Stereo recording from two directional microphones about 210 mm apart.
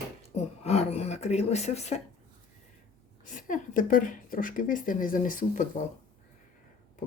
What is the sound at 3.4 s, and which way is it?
Speech, 40° left (ahead or behind).